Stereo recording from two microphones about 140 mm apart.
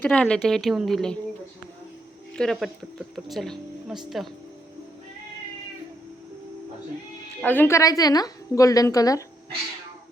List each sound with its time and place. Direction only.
0.0 s a woman's voice: 5° left (ahead or behind)
2.3 s a woman's voice: 5° left (ahead or behind)
7.4 s a woman's voice: 15° left (ahead or behind)